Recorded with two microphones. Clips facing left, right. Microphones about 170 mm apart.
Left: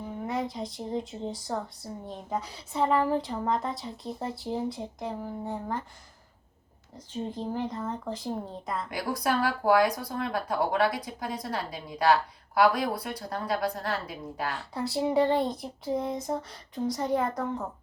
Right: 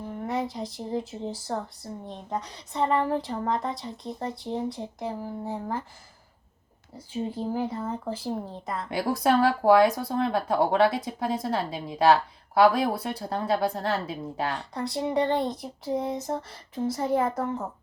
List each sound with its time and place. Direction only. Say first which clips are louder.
0.0 s speech: right 2 dB; centre (ahead or behind)
6.9 s speech: right 3 dB; 10° right (ahead or behind)
8.9 s speech: right 6 dB; 30° right (ahead or behind)
14.7 s speech: left 1 dB; 5° left (ahead or behind)